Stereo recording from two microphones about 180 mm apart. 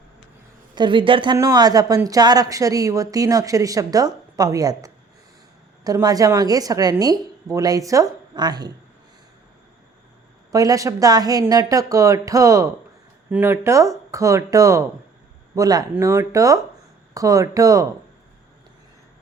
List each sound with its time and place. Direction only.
0.8 s a woman's voice: 25° right (ahead or behind)
10.5 s a woman's voice: 20° right (ahead or behind)